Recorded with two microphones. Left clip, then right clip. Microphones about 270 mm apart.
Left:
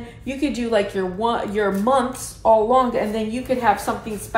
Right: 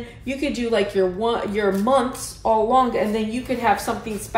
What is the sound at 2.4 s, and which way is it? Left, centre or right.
A woman's voice, centre.